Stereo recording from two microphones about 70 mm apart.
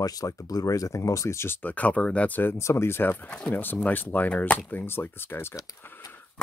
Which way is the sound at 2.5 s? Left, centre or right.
Left.